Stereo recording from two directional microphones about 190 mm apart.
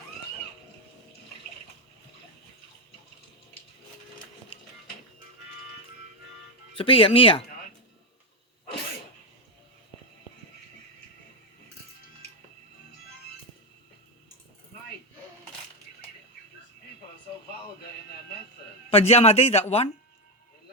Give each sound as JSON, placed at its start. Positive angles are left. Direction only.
{"t": 6.7, "sound": "speech", "side_deg": 30}
{"t": 18.9, "sound": "a man's voice", "side_deg": 35}